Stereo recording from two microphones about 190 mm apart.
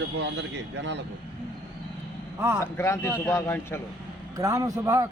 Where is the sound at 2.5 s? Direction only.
15° left (ahead or behind).